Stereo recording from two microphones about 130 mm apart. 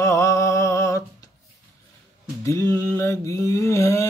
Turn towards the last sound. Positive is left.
turn(degrees=25)  # may be behind; listen again after turning